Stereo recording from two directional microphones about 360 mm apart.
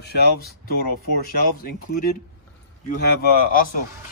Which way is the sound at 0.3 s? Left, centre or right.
Left.